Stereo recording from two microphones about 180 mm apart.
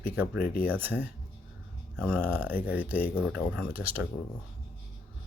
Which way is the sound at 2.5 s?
55° left (ahead or behind).